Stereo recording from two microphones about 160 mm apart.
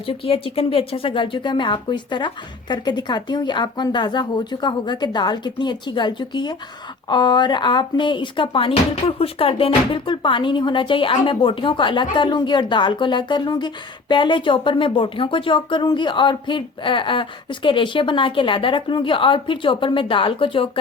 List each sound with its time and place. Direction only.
0.0 s a woman's voice: 35° left (ahead or behind)